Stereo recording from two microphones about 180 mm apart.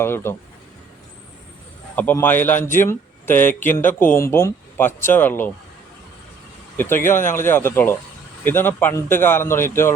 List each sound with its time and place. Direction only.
0.0 s speech: 15° left (ahead or behind)
2.0 s speech: 10° left (ahead or behind)
6.7 s speech: 10° left (ahead or behind)